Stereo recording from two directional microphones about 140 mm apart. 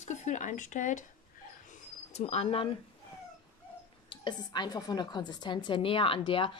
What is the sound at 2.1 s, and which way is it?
Speech, 50° left (ahead or behind).